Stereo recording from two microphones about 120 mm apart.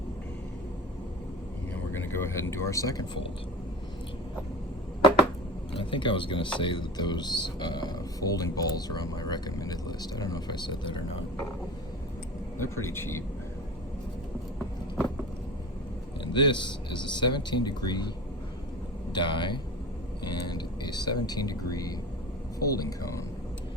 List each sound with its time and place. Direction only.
1.9 s speech: 20° left (ahead or behind)
5.7 s speech: 45° left (ahead or behind)
12.5 s speech: 20° left (ahead or behind)
16.2 s speech: 40° left (ahead or behind)
19.1 s speech: 40° left (ahead or behind)